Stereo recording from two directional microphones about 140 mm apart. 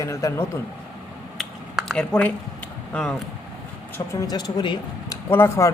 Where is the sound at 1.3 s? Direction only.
Centre (ahead or behind).